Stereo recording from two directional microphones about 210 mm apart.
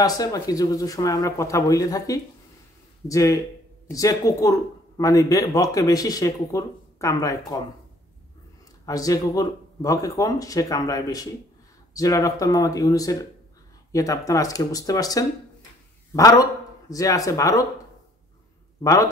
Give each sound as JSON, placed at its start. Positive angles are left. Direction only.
{"t": 0.0, "sound": "speech", "side_deg": 15}
{"t": 8.8, "sound": "speech", "side_deg": 15}
{"t": 18.8, "sound": "a man's voice", "side_deg": 15}